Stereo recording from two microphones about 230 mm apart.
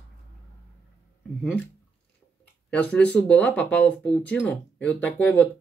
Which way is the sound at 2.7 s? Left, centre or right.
Centre.